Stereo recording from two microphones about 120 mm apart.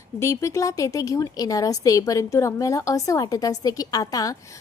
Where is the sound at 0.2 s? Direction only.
25° left (ahead or behind).